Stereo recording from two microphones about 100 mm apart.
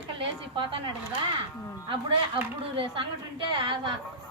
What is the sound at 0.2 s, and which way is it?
Speech, 60° right (ahead or behind).